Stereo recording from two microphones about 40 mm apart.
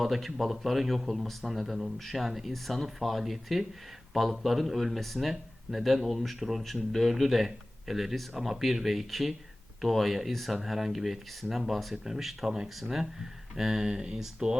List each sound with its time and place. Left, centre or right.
0.0 s speech: centre
13.9 s speech: right